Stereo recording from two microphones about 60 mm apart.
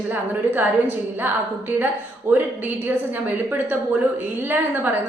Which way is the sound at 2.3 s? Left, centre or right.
Right.